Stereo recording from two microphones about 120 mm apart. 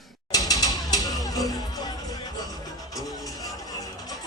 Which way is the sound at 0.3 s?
30° left (ahead or behind).